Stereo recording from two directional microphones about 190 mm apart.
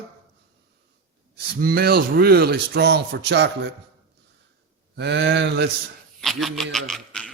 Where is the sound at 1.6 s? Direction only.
50° right (ahead or behind).